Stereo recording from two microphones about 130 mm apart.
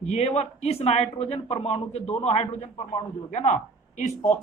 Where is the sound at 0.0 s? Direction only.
55° left (ahead or behind).